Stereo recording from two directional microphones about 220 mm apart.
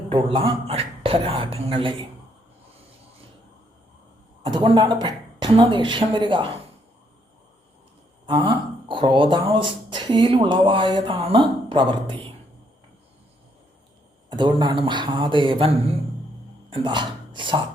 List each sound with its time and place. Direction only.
0.1 s speech: 25° right (ahead or behind)
4.4 s speech: 20° right (ahead or behind)
8.3 s speech: 20° right (ahead or behind)
14.3 s speech: 20° right (ahead or behind)